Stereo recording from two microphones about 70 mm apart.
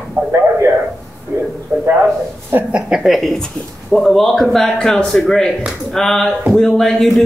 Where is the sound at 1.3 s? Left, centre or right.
Right.